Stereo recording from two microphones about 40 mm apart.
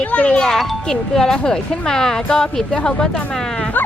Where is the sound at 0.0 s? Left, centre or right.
Left.